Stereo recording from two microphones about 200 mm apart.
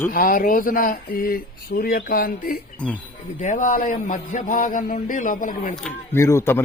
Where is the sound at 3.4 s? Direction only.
40° left (ahead or behind).